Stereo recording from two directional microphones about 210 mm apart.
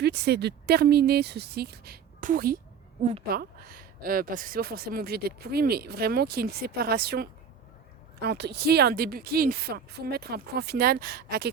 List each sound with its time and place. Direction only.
0.0 s speech: 50° right (ahead or behind)
3.0 s a woman's voice: 30° right (ahead or behind)
3.2 s speech: 45° right (ahead or behind)